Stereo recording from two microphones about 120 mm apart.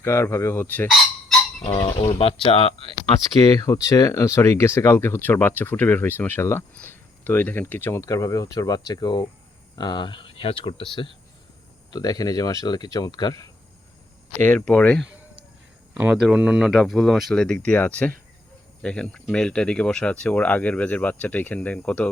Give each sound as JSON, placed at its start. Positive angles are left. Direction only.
{"t": 0.0, "sound": "speech", "side_deg": 20}
{"t": 1.6, "sound": "speech", "side_deg": 45}
{"t": 3.4, "sound": "speech", "side_deg": 30}
{"t": 11.9, "sound": "speech", "side_deg": 30}
{"t": 14.3, "sound": "speech", "side_deg": 15}
{"t": 16.1, "sound": "speech", "side_deg": -5}